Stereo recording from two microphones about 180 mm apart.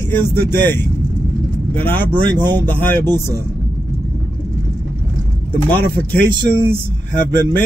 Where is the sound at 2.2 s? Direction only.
25° right (ahead or behind).